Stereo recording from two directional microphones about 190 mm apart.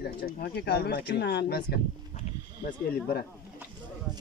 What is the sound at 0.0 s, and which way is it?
Speech, 55° left (ahead or behind).